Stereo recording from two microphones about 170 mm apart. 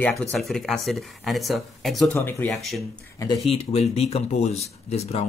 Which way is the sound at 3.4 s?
35° left (ahead or behind).